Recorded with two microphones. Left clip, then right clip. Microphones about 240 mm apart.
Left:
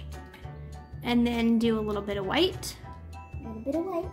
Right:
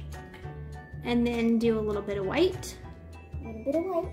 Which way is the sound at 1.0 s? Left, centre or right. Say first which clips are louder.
Left 1 dB; centre.